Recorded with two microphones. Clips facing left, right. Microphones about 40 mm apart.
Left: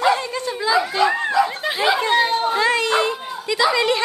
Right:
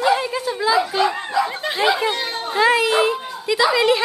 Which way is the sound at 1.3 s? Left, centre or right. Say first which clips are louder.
Left 2 dB; centre.